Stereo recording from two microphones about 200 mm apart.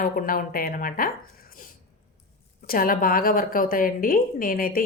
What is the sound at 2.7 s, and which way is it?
A woman's voice, 45° left (ahead or behind).